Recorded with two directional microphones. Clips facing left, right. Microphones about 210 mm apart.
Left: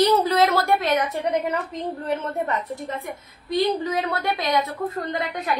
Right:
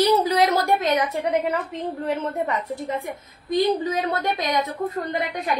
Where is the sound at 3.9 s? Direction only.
20° right (ahead or behind).